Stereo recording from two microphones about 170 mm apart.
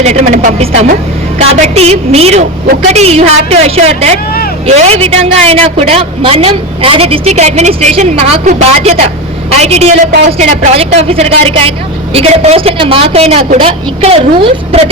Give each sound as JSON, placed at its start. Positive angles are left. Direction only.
{"t": 0.0, "sound": "a woman's voice", "side_deg": -40}